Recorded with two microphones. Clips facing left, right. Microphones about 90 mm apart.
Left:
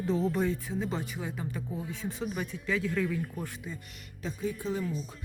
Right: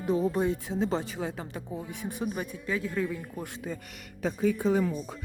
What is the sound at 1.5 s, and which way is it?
Speech, 20° right (ahead or behind).